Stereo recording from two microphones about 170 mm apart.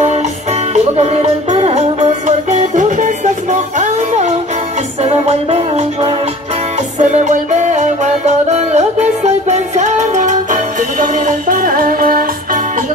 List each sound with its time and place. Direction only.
0.7 s music: 40° right (ahead or behind); by 12.3 s 55° right (ahead or behind)